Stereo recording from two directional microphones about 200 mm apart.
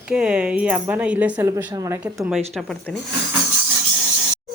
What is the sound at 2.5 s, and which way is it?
Speech, 5° left (ahead or behind).